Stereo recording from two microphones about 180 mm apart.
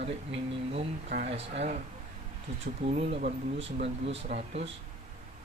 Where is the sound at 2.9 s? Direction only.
40° right (ahead or behind).